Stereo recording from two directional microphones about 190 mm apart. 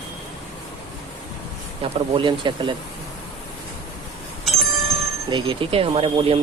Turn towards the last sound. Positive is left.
turn(degrees=-30)  # may be behind; listen again after turning